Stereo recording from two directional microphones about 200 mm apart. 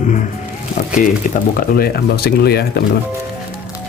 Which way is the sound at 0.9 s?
45° left (ahead or behind).